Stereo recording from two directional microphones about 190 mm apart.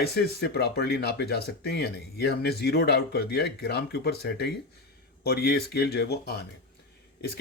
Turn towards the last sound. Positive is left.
turn(degrees=60)  # may be behind; listen again after turning